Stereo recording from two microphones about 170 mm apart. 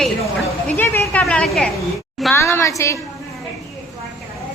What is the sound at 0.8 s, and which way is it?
Speech, 10° left (ahead or behind).